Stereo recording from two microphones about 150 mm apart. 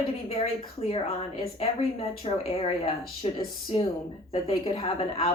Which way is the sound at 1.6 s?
40° left (ahead or behind).